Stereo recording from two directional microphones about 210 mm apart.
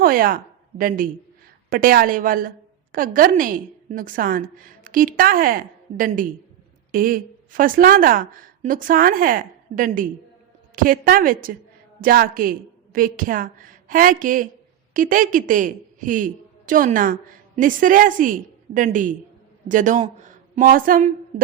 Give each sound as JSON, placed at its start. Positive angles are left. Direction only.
{"t": 0.0, "sound": "a woman's voice", "side_deg": -45}